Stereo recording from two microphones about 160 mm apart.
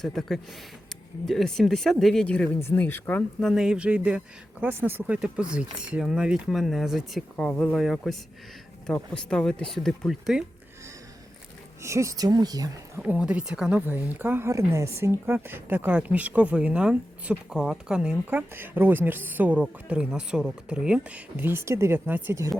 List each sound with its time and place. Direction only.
0.0 s speech: centre (ahead or behind)
3.5 s a woman's voice: 5° right (ahead or behind)
11.8 s speech: 20° right (ahead or behind)
13.0 s a woman's voice: 10° right (ahead or behind)